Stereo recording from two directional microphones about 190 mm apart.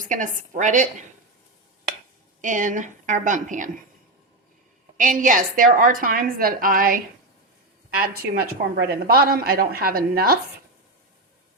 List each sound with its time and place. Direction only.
0.0 s a woman's voice: 40° right (ahead or behind)
2.4 s a woman's voice: 40° right (ahead or behind)
4.9 s a woman's voice: 45° right (ahead or behind)